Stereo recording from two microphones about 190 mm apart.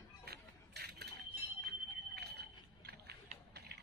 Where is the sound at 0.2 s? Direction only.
55° right (ahead or behind).